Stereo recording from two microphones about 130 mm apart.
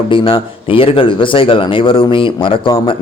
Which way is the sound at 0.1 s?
45° left (ahead or behind).